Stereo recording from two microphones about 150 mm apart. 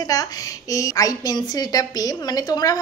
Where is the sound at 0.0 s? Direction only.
25° left (ahead or behind).